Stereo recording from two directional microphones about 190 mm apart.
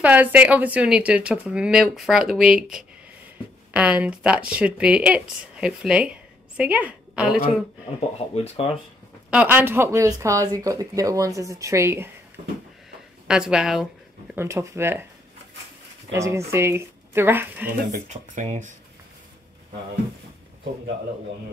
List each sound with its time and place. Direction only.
0.0 s speech: 10° right (ahead or behind)
8.4 s speech: 30° left (ahead or behind)
9.3 s speech: 10° right (ahead or behind)
13.3 s speech: 5° right (ahead or behind)
14.3 s speech: 15° right (ahead or behind)
16.1 s speech: 15° right (ahead or behind)
17.6 s speech: 40° right (ahead or behind)